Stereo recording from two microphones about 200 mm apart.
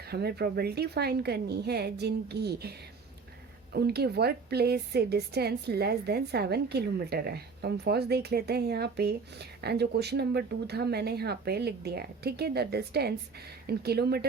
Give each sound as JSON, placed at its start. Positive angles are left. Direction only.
{"t": 0.1, "sound": "a woman's voice", "side_deg": -55}